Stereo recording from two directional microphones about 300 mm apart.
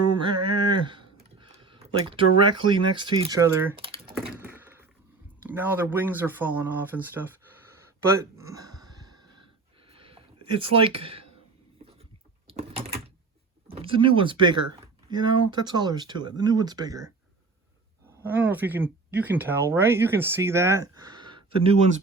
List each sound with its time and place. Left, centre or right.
0.0 s a sound: centre
1.4 s speech: centre
4.2 s crack: centre
5.4 s speech: centre
7.8 s a sound: centre
9.9 s a sound: centre
12.5 s typing: centre
13.7 s speech: centre
18.2 s speech: centre